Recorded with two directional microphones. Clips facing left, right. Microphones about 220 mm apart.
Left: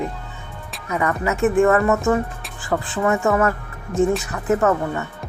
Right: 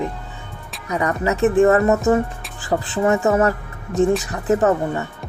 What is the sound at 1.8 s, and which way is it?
Speech, 20° right (ahead or behind).